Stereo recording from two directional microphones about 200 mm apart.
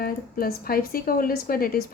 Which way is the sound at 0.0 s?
45° left (ahead or behind).